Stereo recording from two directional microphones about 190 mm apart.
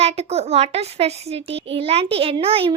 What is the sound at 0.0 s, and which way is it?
A child's voice, 35° right (ahead or behind).